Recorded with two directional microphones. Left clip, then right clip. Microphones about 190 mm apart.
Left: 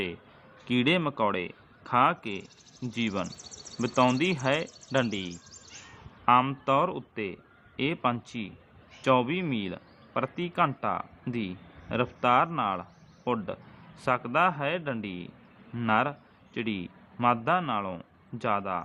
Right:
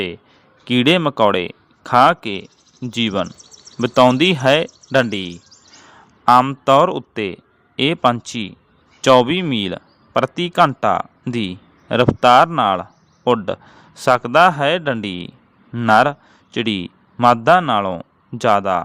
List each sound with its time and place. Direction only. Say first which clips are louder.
0.6 s a man's voice: right 11 dB; 50° right (ahead or behind)